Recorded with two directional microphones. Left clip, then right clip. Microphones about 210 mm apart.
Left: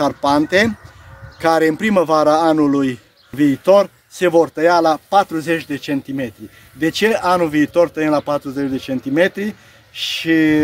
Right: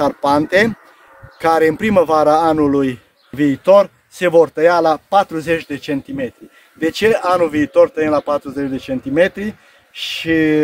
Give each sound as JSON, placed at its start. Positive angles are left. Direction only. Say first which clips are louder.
{"t": 0.0, "sound": "speech", "louder": "right 1 dB", "side_deg": -25}
{"t": 3.3, "sound": "speech", "louder": "right 1 dB", "side_deg": -10}